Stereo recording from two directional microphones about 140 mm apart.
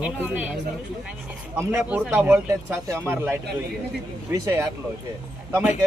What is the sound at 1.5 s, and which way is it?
Speech, 10° right (ahead or behind).